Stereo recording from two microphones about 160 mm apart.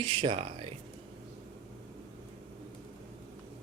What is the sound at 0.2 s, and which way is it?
Speech, 35° right (ahead or behind).